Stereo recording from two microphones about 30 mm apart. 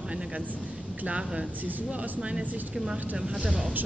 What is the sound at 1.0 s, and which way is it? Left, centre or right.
Speech, right.